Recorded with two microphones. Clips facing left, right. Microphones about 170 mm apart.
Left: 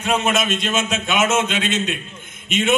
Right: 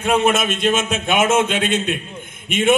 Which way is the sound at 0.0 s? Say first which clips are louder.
Right 3 dB; 55° right (ahead or behind).